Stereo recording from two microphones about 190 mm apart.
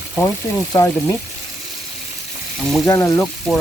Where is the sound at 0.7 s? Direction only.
15° left (ahead or behind).